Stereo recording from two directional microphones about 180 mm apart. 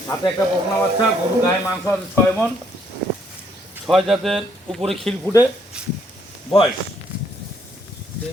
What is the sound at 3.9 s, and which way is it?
Speech, centre (ahead or behind).